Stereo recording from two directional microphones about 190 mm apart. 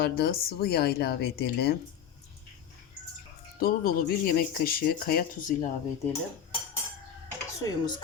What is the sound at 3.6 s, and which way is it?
Speech, 50° left (ahead or behind).